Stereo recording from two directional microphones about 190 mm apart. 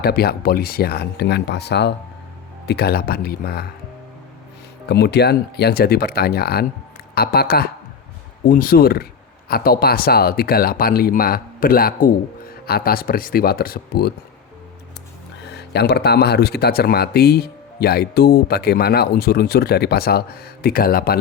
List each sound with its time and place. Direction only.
0.0 s speech: 55° left (ahead or behind)
4.9 s speech: 60° left (ahead or behind)
15.5 s speech: 60° left (ahead or behind)